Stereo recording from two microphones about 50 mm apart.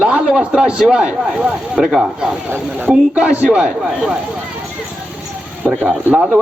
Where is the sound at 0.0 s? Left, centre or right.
Right.